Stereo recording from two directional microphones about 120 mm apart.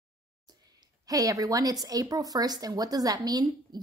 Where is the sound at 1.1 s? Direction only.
30° right (ahead or behind).